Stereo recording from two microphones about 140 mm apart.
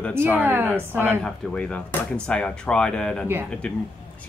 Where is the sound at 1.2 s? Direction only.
10° left (ahead or behind).